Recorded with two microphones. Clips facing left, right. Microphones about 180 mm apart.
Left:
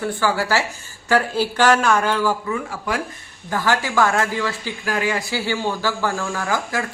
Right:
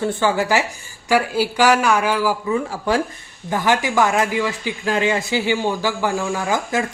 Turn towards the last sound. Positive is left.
turn(degrees=-15)  # may be behind; listen again after turning